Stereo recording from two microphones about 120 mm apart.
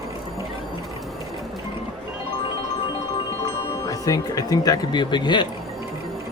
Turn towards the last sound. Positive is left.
turn(degrees=40)  # may be behind; listen again after turning